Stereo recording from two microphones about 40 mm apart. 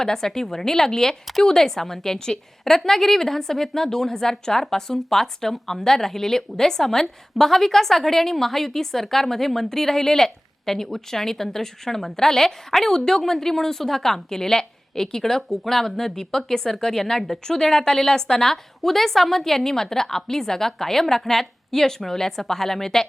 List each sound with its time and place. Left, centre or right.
0.0 s a woman's voice: centre
2.1 s a woman's voice: left
2.6 s a woman's voice: centre